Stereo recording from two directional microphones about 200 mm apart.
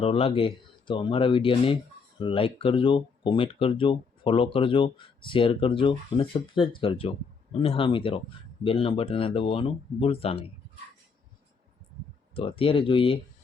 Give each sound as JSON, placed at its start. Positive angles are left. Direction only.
{"t": 0.0, "sound": "speech", "side_deg": 30}
{"t": 12.3, "sound": "speech", "side_deg": 25}